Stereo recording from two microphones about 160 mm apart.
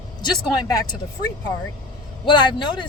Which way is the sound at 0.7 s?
25° left (ahead or behind).